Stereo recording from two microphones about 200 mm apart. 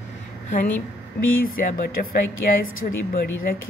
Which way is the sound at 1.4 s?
45° left (ahead or behind).